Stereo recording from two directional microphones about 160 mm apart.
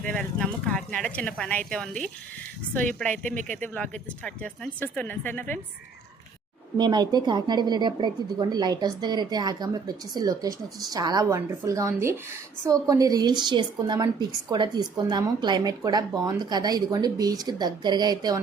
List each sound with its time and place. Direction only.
0.0 s speech: 5° left (ahead or behind)
3.6 s speech: 10° left (ahead or behind)
6.7 s a woman's voice: 25° right (ahead or behind)